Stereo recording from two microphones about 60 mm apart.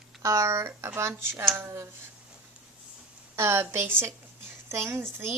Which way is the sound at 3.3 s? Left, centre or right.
Right.